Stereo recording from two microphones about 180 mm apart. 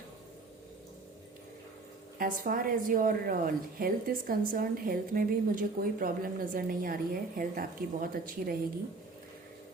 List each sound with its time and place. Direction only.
2.1 s a woman's voice: 50° right (ahead or behind)